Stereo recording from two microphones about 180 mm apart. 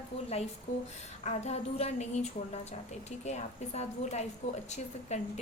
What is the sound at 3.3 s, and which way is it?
A woman's voice, 40° left (ahead or behind).